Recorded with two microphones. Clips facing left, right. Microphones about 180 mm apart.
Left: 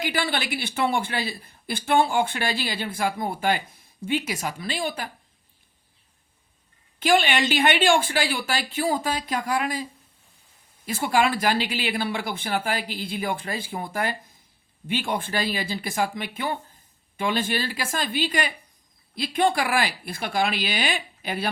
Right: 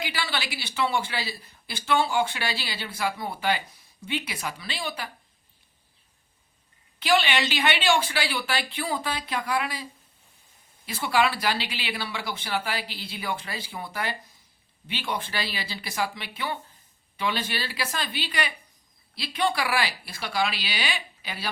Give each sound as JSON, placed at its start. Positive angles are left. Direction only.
{"t": 0.0, "sound": "a man's voice", "side_deg": 50}
{"t": 7.0, "sound": "a man's voice", "side_deg": 45}
{"t": 10.8, "sound": "a man's voice", "side_deg": 45}